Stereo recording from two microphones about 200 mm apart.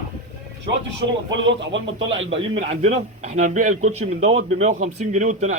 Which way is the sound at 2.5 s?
35° right (ahead or behind).